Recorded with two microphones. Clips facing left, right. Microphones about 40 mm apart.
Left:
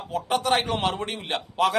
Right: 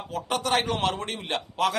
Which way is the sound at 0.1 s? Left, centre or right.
Centre.